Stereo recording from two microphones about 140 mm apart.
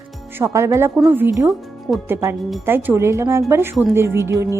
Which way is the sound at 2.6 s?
15° right (ahead or behind).